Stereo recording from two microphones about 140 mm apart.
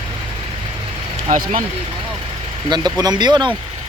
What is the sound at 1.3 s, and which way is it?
Speech, 60° right (ahead or behind).